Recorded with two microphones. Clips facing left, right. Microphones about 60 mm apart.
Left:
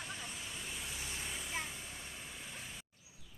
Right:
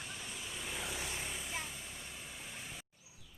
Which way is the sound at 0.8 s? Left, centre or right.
Right.